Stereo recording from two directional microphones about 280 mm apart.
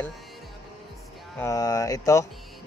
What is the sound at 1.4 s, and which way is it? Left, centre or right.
Speech, centre.